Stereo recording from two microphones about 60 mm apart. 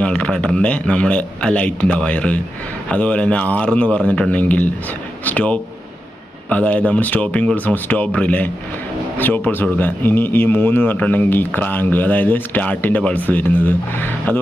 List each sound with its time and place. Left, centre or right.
0.0 s a man's voice: centre; by 14.4 s left